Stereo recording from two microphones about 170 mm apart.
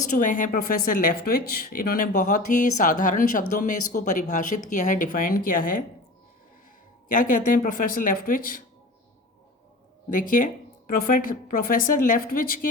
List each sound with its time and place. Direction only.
0.2 s speech: 50° left (ahead or behind)
7.1 s speech: 50° left (ahead or behind)
10.1 s a woman's voice: 50° left (ahead or behind)